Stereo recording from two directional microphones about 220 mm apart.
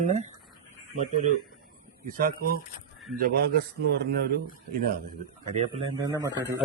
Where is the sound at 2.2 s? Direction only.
40° right (ahead or behind).